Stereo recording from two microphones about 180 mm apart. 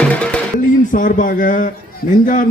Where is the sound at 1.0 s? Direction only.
50° left (ahead or behind).